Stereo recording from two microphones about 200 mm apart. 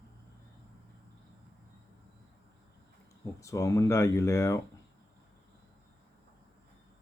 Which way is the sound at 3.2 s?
15° left (ahead or behind).